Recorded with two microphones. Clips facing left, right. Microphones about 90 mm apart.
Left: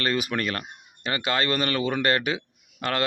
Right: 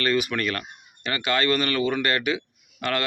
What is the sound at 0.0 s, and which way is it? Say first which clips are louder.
A man's voice: right 2 dB; 30° left (ahead or behind).